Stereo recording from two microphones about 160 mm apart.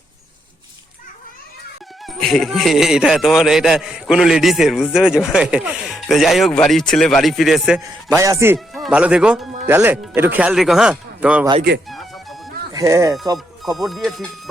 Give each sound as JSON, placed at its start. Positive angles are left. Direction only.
{"t": 2.0, "sound": "speech", "side_deg": 0}
{"t": 8.1, "sound": "speech", "side_deg": -20}
{"t": 8.5, "sound": "speech", "side_deg": 0}
{"t": 11.9, "sound": "music", "side_deg": 0}
{"t": 12.7, "sound": "speech", "side_deg": -20}
{"t": 13.7, "sound": "speech", "side_deg": 0}